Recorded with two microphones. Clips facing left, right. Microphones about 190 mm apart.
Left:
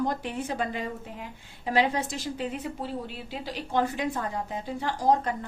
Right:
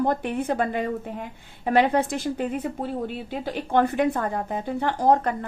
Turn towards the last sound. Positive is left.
turn(degrees=-60)  # may be behind; listen again after turning